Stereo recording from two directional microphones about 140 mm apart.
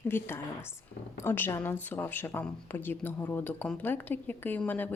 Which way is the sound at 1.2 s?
15° left (ahead or behind).